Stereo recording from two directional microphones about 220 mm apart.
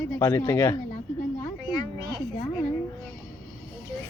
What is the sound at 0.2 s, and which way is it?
Speech, 15° left (ahead or behind).